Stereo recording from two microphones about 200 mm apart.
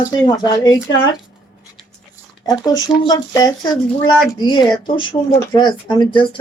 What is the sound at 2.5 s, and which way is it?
Speech, 20° left (ahead or behind).